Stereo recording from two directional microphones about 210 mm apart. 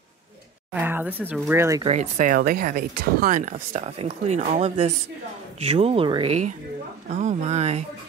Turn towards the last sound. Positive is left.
turn(degrees=-30)  # may be behind; listen again after turning